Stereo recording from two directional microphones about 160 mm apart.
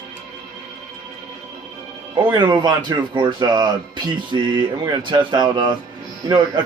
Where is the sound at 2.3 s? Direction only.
25° right (ahead or behind).